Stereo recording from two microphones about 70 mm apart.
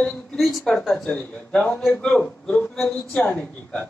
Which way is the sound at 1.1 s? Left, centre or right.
Centre.